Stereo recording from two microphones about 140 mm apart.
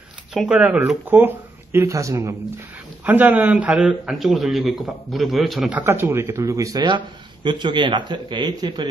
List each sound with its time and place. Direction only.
0.3 s a man's voice: 5° right (ahead or behind)
5.8 s speech: 15° right (ahead or behind)